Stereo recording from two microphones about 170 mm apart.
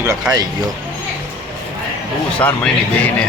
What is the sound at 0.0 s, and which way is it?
Speech, 15° right (ahead or behind).